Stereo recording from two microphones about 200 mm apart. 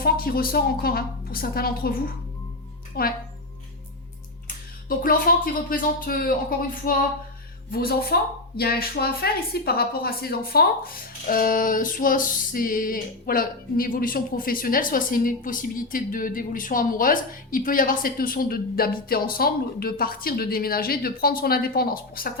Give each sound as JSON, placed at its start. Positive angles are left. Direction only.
{"t": 0.0, "sound": "music", "side_deg": 45}
{"t": 4.4, "sound": "speech", "side_deg": 45}
{"t": 6.8, "sound": "music", "side_deg": 45}